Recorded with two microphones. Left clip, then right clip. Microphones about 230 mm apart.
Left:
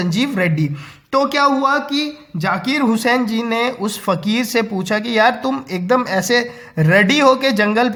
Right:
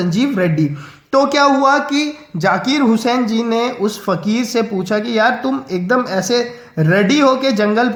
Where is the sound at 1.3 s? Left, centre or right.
Left.